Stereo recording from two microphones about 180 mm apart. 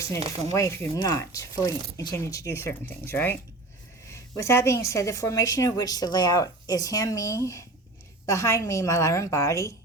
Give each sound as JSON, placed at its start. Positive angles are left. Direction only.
{"t": 0.5, "sound": "a woman's voice", "side_deg": 15}